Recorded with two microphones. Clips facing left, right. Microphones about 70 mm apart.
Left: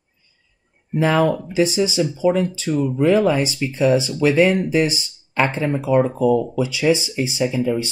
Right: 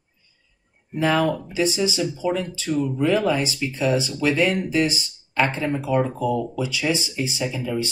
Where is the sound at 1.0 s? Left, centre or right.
Centre.